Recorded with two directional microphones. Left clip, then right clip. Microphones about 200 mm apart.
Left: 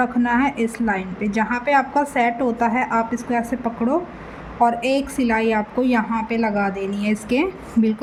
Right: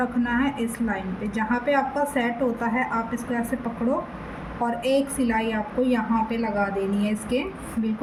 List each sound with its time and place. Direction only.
0.0 s a woman's voice: 50° left (ahead or behind)
4.6 s a woman's voice: 50° left (ahead or behind)